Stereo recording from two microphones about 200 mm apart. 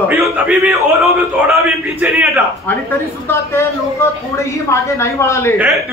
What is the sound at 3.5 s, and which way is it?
Speech, 15° left (ahead or behind).